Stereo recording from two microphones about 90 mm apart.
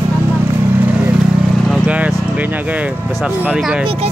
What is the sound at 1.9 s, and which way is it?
Vehicle, 15° right (ahead or behind).